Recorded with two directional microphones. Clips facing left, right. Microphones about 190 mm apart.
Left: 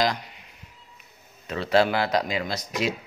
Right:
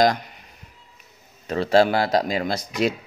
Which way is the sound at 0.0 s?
50° right (ahead or behind).